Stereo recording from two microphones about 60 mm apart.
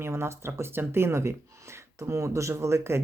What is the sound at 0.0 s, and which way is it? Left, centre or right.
Speech, right.